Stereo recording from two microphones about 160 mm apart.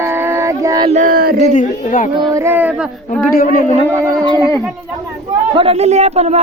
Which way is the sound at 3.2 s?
65° left (ahead or behind).